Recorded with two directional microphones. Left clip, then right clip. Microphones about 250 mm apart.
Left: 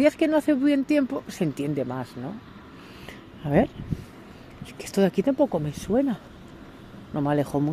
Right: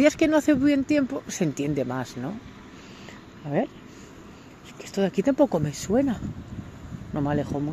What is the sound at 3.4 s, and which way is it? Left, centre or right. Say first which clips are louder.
Speech: left 5 dB; centre.